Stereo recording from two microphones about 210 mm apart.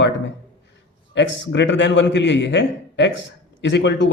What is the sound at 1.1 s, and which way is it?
Speech, 60° left (ahead or behind).